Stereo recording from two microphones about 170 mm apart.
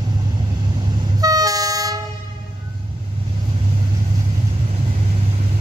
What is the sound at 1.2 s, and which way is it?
Train, 20° right (ahead or behind).